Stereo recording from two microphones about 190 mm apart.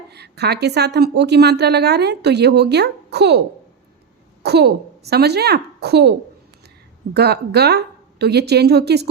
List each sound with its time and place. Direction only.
0.1 s a woman's voice: 60° right (ahead or behind)
4.4 s a woman's voice: 60° right (ahead or behind)